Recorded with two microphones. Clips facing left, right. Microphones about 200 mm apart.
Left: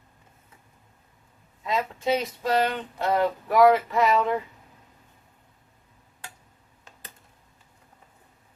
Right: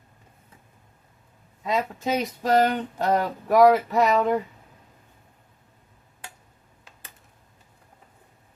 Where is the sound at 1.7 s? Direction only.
45° right (ahead or behind).